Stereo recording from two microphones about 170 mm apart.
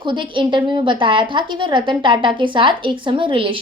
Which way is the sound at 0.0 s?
30° right (ahead or behind).